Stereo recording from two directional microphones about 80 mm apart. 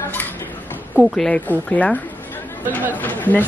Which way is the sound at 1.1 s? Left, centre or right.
Centre.